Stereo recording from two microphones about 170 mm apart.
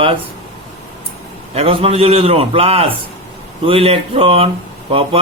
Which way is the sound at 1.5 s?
35° right (ahead or behind).